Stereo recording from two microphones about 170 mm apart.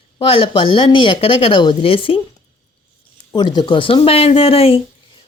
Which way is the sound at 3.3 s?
25° left (ahead or behind).